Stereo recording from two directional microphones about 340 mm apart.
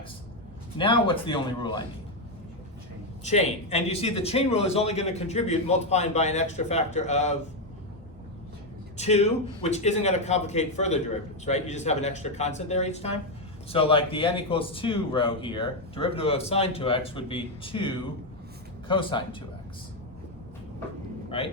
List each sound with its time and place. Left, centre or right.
0.8 s a man's voice: centre
3.2 s a man's voice: centre
9.0 s a man's voice: centre
21.2 s vehicle: centre